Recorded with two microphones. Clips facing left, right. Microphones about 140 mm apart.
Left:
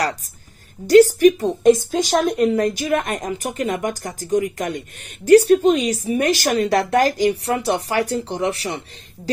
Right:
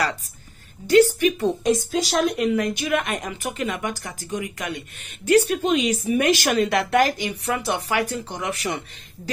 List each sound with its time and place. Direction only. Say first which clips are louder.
0.8 s speech: left 5 dB; 40° left (ahead or behind)
1.6 s a woman's voice: left 7 dB; 50° left (ahead or behind)
2.4 s speech: left 4 dB; 40° left (ahead or behind)